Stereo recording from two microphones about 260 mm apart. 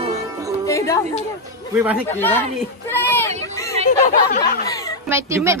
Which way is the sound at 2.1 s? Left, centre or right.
Centre.